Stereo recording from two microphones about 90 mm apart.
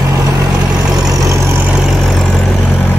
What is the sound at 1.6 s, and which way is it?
Vehicle, 10° right (ahead or behind).